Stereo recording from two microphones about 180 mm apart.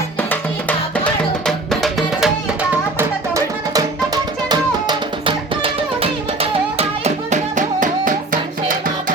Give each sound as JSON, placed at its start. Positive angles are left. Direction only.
{"t": 0.2, "sound": "music", "side_deg": 10}
{"t": 3.0, "sound": "music", "side_deg": -20}